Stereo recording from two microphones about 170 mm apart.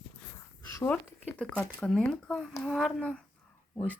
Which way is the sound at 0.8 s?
10° left (ahead or behind).